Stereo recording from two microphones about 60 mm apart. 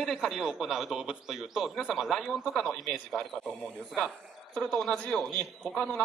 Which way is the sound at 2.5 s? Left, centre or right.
Centre.